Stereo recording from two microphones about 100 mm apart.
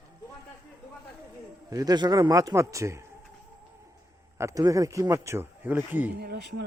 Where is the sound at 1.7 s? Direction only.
40° right (ahead or behind).